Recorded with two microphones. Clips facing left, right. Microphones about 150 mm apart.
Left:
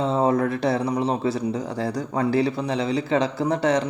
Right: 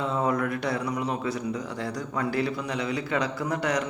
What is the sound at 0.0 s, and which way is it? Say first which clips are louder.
Speech: left 6 dB; 30° left (ahead or behind).